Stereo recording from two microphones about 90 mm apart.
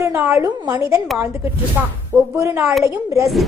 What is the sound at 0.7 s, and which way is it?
Speech, 35° right (ahead or behind).